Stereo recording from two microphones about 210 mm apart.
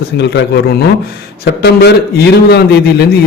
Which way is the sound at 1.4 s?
50° left (ahead or behind).